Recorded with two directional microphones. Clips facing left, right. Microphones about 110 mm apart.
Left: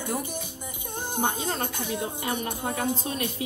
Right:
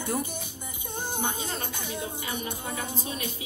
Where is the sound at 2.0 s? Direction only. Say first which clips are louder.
Left 4 dB; 55° left (ahead or behind).